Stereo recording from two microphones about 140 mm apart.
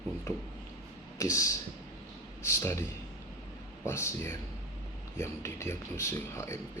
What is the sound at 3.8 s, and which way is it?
Speech, 15° left (ahead or behind).